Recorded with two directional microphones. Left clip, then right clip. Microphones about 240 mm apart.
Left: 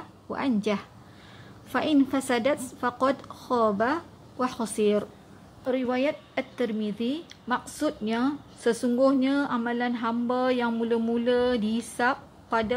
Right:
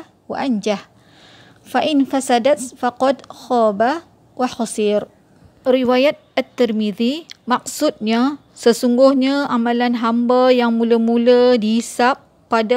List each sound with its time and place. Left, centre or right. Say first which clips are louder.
0.3 s a woman's voice: right 8 dB; right